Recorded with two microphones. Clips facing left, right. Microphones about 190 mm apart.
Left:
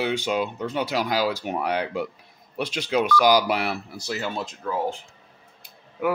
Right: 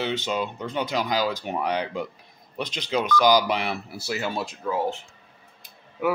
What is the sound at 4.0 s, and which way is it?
Speech, 10° right (ahead or behind).